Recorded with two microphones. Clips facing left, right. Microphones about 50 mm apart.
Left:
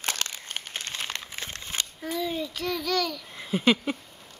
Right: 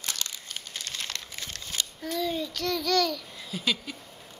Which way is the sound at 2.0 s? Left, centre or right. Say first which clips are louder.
Even; centre.